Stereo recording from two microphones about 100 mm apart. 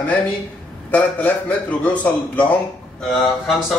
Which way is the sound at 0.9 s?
15° left (ahead or behind).